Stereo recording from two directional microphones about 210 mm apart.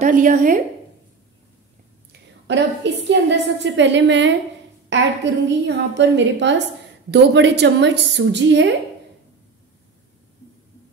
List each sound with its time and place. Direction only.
0.0 s a woman's voice: 35° right (ahead or behind)
2.4 s a woman's voice: 55° right (ahead or behind)